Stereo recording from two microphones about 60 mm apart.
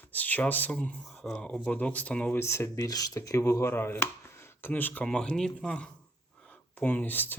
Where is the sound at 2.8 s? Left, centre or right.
Left.